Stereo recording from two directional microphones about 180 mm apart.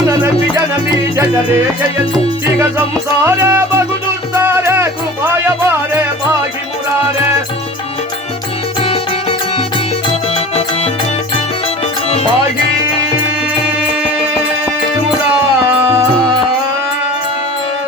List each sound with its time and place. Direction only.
3.2 s music: 15° right (ahead or behind)
10.3 s music: 35° left (ahead or behind)
15.6 s music: 15° right (ahead or behind)